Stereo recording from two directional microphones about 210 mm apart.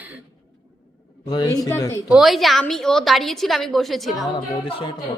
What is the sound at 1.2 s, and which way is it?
Speech, 20° left (ahead or behind).